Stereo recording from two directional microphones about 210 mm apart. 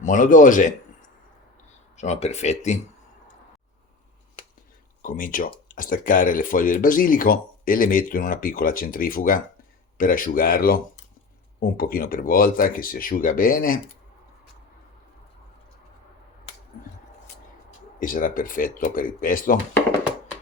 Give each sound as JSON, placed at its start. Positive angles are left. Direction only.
{"t": 0.0, "sound": "speech", "side_deg": 40}
{"t": 2.0, "sound": "speech", "side_deg": 30}
{"t": 5.0, "sound": "speech", "side_deg": 40}
{"t": 18.0, "sound": "speech", "side_deg": 40}